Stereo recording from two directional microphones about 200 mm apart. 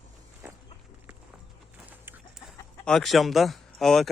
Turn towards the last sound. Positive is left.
turn(degrees=0)  # may be behind; listen again after turning